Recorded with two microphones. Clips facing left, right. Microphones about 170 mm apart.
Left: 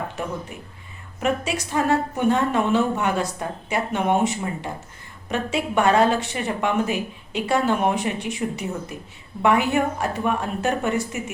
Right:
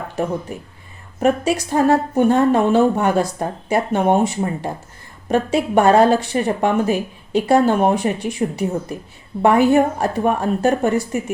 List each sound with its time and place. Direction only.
0.5 s a woman's voice: 35° right (ahead or behind)